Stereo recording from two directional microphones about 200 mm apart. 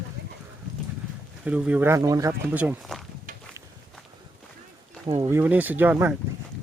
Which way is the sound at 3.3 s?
40° right (ahead or behind).